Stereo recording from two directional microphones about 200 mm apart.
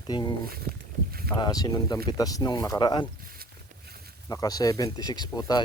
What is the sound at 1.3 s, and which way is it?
Speech, 20° left (ahead or behind).